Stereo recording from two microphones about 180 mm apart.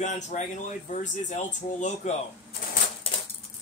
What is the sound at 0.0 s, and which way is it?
Speech, 40° left (ahead or behind).